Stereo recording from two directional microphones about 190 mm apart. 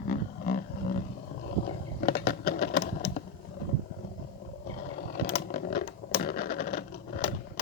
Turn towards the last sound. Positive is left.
turn(degrees=50)  # may be behind; listen again after turning